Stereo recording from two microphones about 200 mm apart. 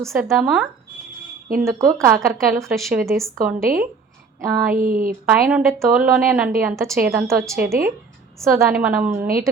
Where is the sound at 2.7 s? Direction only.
Centre (ahead or behind).